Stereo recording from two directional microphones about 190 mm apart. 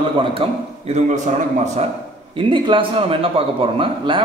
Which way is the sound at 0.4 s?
30° right (ahead or behind).